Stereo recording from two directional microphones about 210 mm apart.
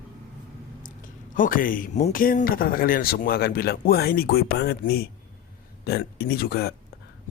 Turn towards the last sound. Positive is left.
turn(degrees=45)  # may be behind; listen again after turning